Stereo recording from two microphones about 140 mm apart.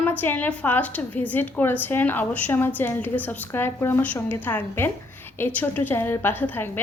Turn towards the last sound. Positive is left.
turn(degrees=15)  # may be behind; listen again after turning